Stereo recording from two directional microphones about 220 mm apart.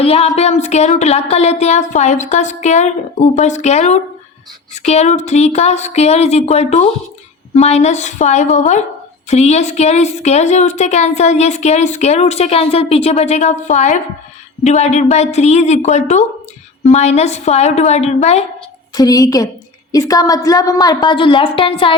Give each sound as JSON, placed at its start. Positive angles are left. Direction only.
{"t": 0.0, "sound": "speech", "side_deg": 25}
{"t": 18.9, "sound": "a woman's voice", "side_deg": 15}